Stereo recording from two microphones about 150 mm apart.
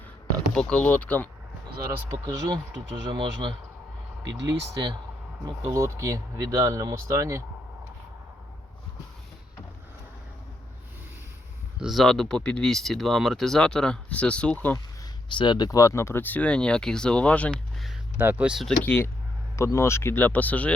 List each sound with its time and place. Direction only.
0.5 s speech: 5° left (ahead or behind)
2.0 s speech: 25° right (ahead or behind)
11.8 s speech: centre (ahead or behind)
15.3 s speech: 30° left (ahead or behind); by 17.9 s 5° left (ahead or behind)
18.2 s speech: 10° right (ahead or behind)
18.9 s speech: 15° left (ahead or behind)